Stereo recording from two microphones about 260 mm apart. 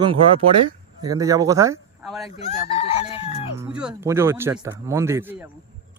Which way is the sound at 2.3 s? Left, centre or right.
Left.